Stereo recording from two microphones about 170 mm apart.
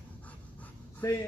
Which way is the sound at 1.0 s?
15° left (ahead or behind).